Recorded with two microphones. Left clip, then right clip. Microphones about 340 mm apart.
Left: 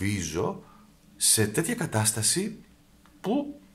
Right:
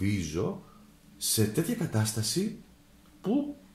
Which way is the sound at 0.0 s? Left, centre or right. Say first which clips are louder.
Left 3 dB; left.